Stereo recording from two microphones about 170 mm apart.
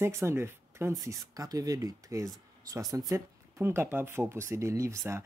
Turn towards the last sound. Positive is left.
turn(degrees=-15)  # may be behind; listen again after turning